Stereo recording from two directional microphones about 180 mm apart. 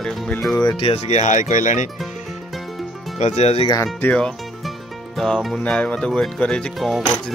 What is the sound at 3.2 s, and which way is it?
Speech, 40° left (ahead or behind).